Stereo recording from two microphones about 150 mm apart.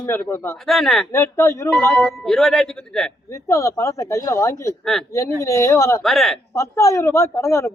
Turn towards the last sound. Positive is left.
turn(degrees=20)  # may be behind; listen again after turning